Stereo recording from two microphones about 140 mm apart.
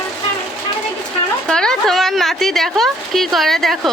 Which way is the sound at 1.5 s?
5° left (ahead or behind).